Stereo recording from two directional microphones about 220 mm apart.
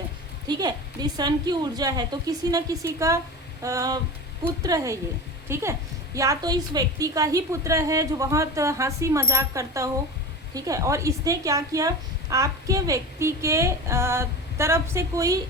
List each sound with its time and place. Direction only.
0.4 s a woman's voice: 20° right (ahead or behind)